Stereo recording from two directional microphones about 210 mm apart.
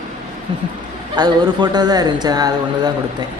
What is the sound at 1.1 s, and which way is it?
A man's voice, 20° right (ahead or behind).